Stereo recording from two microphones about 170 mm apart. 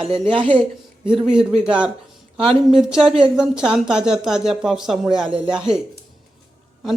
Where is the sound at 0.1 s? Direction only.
30° right (ahead or behind).